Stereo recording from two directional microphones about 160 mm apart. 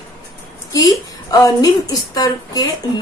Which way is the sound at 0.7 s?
20° left (ahead or behind).